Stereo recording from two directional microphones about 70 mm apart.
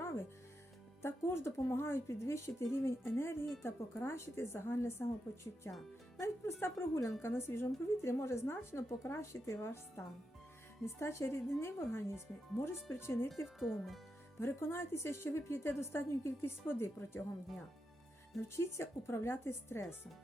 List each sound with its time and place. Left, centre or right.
1.0 s a woman's voice: left
13.2 s speech: centre
14.3 s a woman's voice: left
18.4 s a woman's voice: left